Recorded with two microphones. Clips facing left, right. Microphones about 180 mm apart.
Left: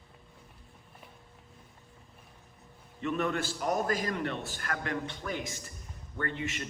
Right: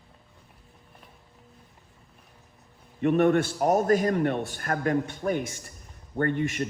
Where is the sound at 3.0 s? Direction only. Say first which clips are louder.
Right 10 dB; 60° right (ahead or behind).